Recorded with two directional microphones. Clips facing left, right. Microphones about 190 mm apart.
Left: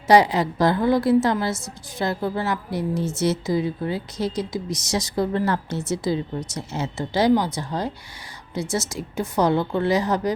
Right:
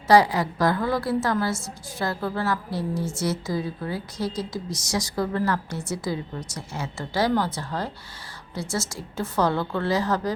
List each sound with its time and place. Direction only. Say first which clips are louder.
0.1 s a woman's voice: left 2 dB; 20° left (ahead or behind)